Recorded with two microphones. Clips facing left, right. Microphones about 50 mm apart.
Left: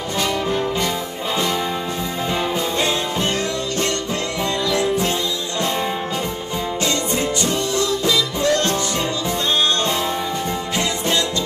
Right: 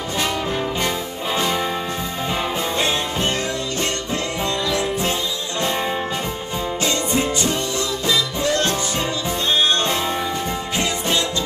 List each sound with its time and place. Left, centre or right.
0.2 s brass instrument: centre
6.8 s music: centre